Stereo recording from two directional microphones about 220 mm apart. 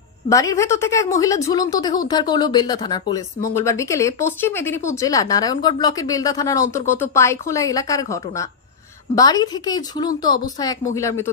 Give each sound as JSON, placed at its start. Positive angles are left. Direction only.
{"t": 0.3, "sound": "speech", "side_deg": 15}